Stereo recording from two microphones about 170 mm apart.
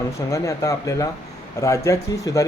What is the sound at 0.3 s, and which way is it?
Speech, 20° left (ahead or behind).